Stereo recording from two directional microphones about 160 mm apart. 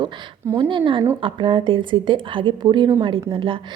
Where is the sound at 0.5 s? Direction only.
35° right (ahead or behind).